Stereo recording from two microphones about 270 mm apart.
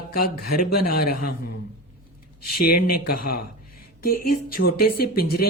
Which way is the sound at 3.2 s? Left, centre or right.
Left.